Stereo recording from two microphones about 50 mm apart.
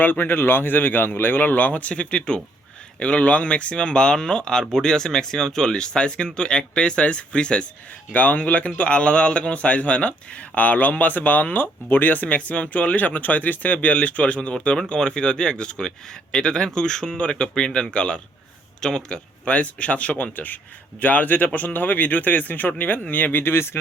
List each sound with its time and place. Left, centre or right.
0.0 s speech: left
8.1 s speech: left